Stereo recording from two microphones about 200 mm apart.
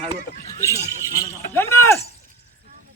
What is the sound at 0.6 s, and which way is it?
Speech, 15° left (ahead or behind).